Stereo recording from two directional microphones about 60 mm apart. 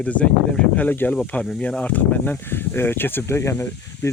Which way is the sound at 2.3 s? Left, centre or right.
Left.